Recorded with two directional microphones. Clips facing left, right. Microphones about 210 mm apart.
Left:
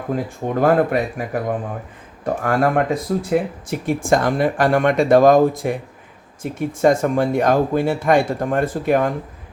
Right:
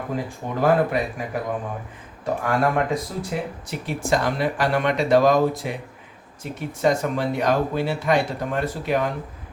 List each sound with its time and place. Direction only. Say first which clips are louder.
0.6 s speech: left 3 dB; 55° left (ahead or behind)